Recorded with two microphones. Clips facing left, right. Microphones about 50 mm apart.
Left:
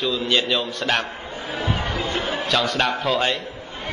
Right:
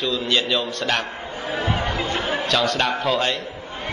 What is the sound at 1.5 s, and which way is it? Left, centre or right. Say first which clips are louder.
Chatter: right 2 dB; right.